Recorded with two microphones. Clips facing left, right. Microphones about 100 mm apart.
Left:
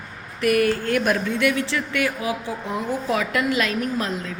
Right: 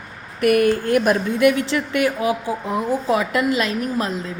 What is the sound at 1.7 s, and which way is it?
A woman's voice, 20° right (ahead or behind).